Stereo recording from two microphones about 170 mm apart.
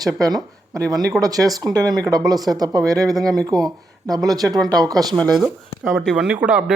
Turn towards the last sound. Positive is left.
turn(degrees=-5)  # may be behind; listen again after turning